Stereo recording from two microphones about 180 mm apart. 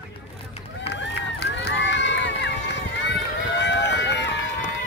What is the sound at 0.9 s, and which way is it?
Run, 85° left.